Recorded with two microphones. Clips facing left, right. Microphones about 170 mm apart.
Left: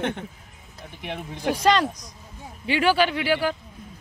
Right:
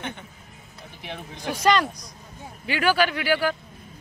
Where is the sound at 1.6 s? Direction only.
30° left (ahead or behind).